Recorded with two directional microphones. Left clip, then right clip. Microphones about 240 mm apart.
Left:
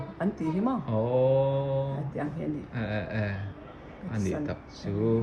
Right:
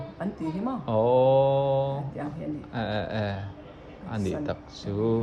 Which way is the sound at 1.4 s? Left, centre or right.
Right.